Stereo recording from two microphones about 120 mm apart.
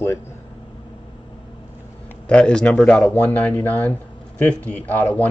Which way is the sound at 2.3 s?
10° left (ahead or behind).